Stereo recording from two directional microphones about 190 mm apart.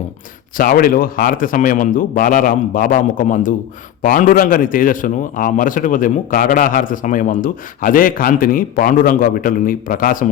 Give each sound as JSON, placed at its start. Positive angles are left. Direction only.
{"t": 0.5, "sound": "a man's voice", "side_deg": 50}